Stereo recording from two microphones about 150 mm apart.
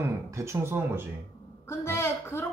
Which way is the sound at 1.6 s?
20° left (ahead or behind).